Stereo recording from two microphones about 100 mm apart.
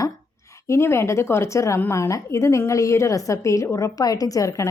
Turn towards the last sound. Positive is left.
turn(degrees=35)  # may be behind; listen again after turning